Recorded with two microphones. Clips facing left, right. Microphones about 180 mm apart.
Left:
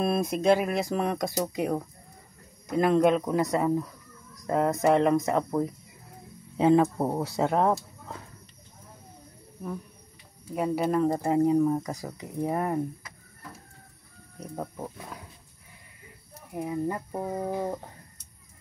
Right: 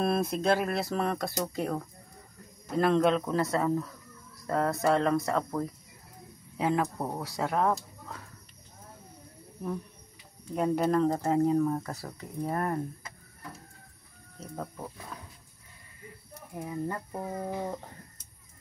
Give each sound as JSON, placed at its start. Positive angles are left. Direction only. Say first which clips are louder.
{"t": 0.0, "sound": "speech", "louder": "left 3 dB", "side_deg": 15}
{"t": 6.5, "sound": "speech", "louder": "left 8 dB", "side_deg": 30}
{"t": 10.5, "sound": "speech", "louder": "even", "side_deg": 5}
{"t": 14.4, "sound": "speech", "louder": "left 3 dB", "side_deg": 15}
{"t": 16.5, "sound": "speech", "louder": "left 4 dB", "side_deg": 15}